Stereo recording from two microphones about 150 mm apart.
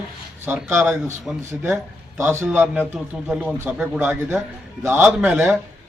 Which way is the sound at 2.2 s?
15° right (ahead or behind).